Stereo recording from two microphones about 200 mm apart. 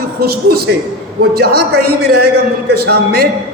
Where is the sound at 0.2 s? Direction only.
50° right (ahead or behind).